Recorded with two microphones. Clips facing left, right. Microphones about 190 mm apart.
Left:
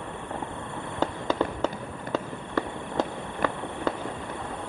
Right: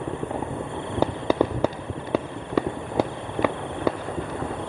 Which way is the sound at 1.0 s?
10° right (ahead or behind).